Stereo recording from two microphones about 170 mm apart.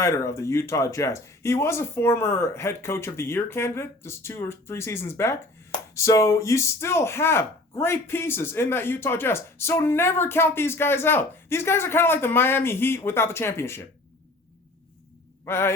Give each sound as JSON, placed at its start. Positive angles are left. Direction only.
{"t": 0.0, "sound": "speech", "side_deg": 15}
{"t": 15.4, "sound": "speech", "side_deg": 15}